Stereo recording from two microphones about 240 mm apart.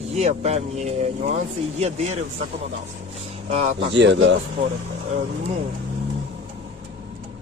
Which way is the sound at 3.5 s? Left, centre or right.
Right.